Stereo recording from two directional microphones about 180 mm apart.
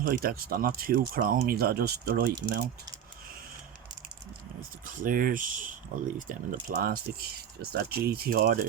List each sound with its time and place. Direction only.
0.0 s speech: 50° right (ahead or behind)
4.9 s speech: 50° right (ahead or behind)